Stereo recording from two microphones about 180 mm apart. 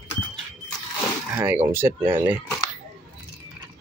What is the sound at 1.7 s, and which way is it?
Speech, 10° right (ahead or behind).